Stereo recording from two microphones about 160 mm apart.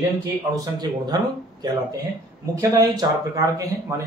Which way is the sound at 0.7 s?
25° right (ahead or behind).